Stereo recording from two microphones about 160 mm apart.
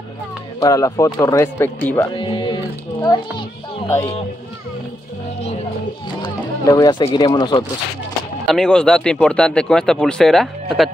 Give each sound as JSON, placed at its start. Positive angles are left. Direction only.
{"t": 0.6, "sound": "speech", "side_deg": 20}
{"t": 2.0, "sound": "children playing", "side_deg": 30}
{"t": 6.6, "sound": "speech", "side_deg": 20}
{"t": 8.5, "sound": "speech", "side_deg": 5}